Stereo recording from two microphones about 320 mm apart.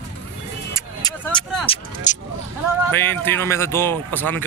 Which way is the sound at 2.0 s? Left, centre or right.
Left.